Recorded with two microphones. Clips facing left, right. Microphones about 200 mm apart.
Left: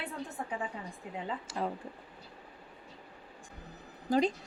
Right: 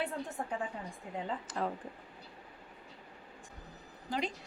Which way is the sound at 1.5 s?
10° left (ahead or behind).